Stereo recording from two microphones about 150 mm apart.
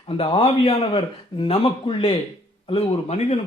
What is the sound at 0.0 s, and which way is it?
A man's voice, 40° left (ahead or behind).